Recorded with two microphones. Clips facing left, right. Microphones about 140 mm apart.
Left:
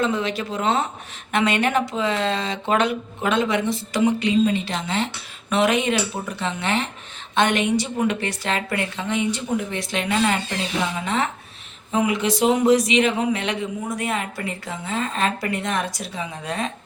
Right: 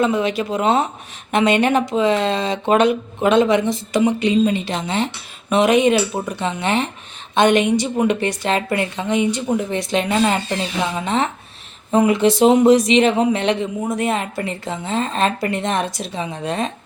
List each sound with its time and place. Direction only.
0.0 s speech: 15° right (ahead or behind)
11.9 s speech: 35° right (ahead or behind)